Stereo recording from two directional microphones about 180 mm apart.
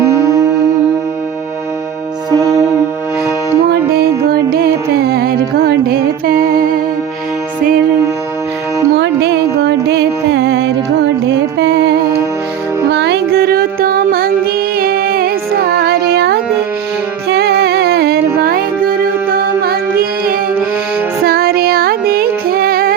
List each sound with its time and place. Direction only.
0.0 s music: 15° right (ahead or behind)
2.3 s music: 15° right (ahead or behind)
3.7 s music: 60° right (ahead or behind)
9.0 s music: 70° right (ahead or behind)
18.4 s music: 55° right (ahead or behind)